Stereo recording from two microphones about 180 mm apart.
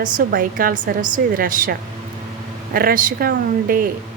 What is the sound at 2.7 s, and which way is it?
A woman's voice, 50° right (ahead or behind).